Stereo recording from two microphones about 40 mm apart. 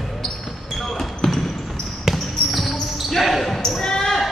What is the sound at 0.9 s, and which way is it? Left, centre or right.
Basketball bounce, centre.